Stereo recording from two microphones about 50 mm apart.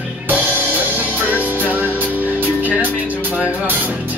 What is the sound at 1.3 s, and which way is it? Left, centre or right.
Music, right.